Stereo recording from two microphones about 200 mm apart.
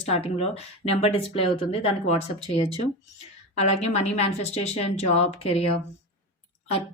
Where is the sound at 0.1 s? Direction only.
30° left (ahead or behind).